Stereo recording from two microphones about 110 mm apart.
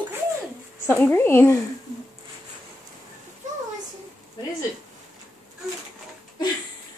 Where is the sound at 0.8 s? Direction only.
20° left (ahead or behind).